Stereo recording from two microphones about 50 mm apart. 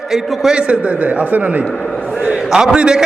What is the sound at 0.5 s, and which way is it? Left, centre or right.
A man's voice, right.